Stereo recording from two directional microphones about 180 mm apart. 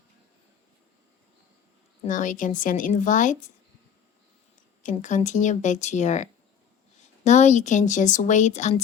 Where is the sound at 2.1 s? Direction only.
45° left (ahead or behind).